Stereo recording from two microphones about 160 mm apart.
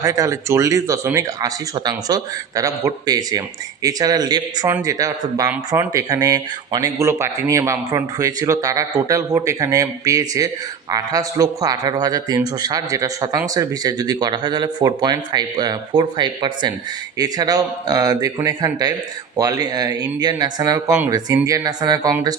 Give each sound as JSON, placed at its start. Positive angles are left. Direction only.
{"t": 0.0, "sound": "speech", "side_deg": -20}